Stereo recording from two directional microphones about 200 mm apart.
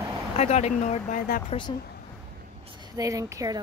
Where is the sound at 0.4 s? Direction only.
35° left (ahead or behind).